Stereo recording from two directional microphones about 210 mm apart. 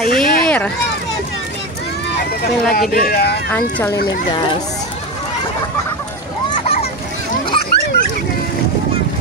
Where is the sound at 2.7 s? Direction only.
45° left (ahead or behind).